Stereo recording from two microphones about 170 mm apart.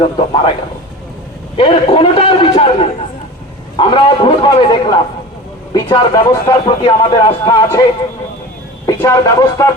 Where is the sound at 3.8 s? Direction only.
30° left (ahead or behind).